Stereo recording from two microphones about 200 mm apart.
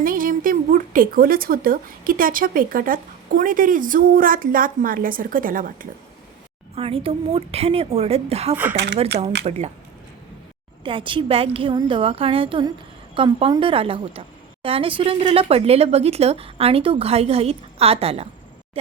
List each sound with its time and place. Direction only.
0.0 s a woman's voice: 45° right (ahead or behind)
6.7 s a woman's voice: 30° right (ahead or behind)
8.7 s speech: 60° right (ahead or behind)
9.4 s speech: 30° right (ahead or behind)
10.8 s a woman's voice: 25° right (ahead or behind)